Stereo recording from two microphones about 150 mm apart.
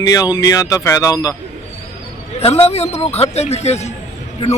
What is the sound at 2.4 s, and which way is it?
A man's voice, 40° left (ahead or behind).